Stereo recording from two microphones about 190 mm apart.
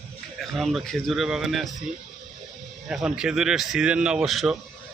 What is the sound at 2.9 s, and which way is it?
Speech, 5° right (ahead or behind).